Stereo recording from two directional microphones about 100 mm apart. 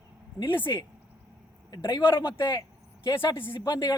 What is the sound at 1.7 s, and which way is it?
Speech, 55° left (ahead or behind).